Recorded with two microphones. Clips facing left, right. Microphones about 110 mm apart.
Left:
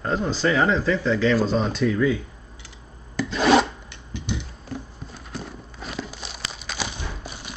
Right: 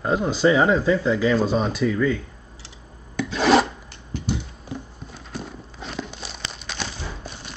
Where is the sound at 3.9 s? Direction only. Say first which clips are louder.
Right 3 dB; 40° right (ahead or behind).